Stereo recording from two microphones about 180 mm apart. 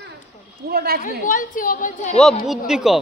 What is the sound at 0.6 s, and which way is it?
Speech, 60° right (ahead or behind).